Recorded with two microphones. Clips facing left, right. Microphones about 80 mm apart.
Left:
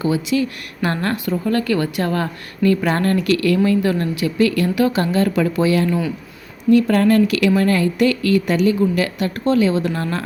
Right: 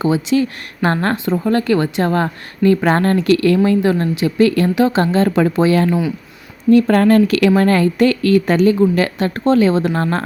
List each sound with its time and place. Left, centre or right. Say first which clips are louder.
0.0 s speech: right 3 dB; right